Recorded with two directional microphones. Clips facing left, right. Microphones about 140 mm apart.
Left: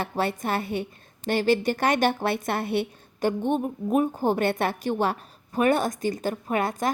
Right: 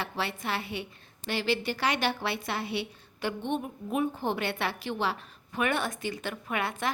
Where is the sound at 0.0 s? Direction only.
45° left (ahead or behind).